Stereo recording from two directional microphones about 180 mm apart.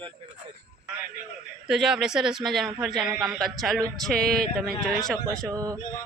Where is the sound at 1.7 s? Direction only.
Centre (ahead or behind).